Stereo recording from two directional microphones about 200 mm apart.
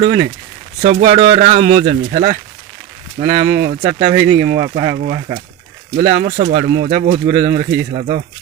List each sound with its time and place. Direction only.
0.0 s speech: 45° right (ahead or behind)
3.2 s speech: 35° right (ahead or behind)
3.7 s speech: 35° right (ahead or behind)
4.3 s speech: 55° right (ahead or behind)
4.5 s speech: 30° right (ahead or behind)
6.4 s speech: 45° right (ahead or behind)